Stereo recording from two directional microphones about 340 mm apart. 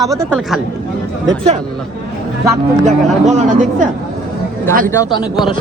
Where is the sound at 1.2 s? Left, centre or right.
Centre.